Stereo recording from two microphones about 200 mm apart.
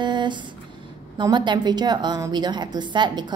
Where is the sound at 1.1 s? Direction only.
20° right (ahead or behind).